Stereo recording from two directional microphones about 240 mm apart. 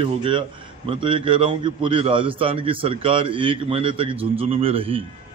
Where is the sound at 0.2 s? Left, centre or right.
Right.